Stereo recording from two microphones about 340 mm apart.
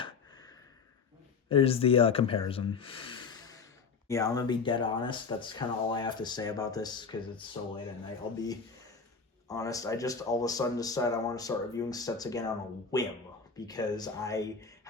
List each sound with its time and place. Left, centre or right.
0.0 s a sound: centre
1.5 s speech: centre
9.5 s speech: centre